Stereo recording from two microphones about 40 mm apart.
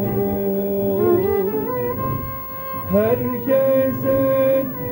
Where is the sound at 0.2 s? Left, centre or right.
Centre.